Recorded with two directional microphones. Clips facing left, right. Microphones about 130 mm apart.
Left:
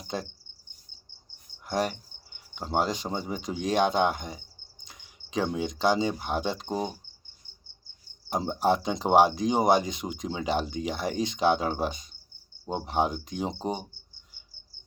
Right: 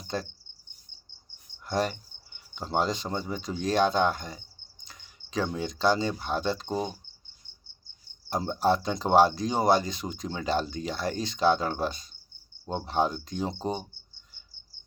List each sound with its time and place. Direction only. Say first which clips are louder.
0.1 s speech: right 1 dB; 15° left (ahead or behind)
1.6 s speech: even; 10° left (ahead or behind)
8.3 s speech: even; 15° left (ahead or behind)